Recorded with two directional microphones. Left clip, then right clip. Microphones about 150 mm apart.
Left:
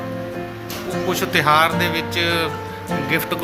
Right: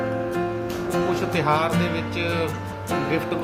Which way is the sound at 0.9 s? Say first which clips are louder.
Left 4 dB; centre (ahead or behind).